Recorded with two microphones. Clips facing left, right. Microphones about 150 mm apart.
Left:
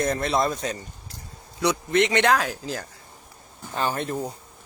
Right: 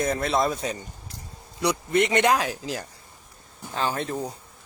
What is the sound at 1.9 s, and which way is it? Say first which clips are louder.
Speech: even; 10° right (ahead or behind).